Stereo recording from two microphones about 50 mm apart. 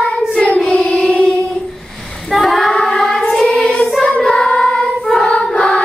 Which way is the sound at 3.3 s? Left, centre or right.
Centre.